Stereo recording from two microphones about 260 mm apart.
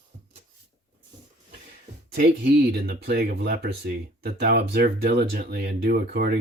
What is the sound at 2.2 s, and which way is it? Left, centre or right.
Speech, right.